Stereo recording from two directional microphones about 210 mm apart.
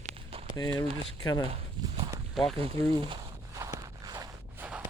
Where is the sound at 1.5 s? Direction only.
25° right (ahead or behind).